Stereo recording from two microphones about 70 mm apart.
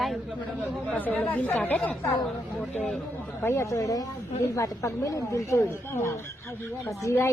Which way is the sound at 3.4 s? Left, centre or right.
Left.